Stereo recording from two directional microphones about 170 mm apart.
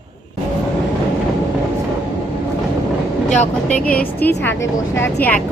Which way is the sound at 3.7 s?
5° left (ahead or behind).